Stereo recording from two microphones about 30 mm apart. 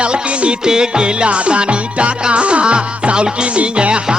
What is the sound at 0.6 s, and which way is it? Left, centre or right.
Music, right.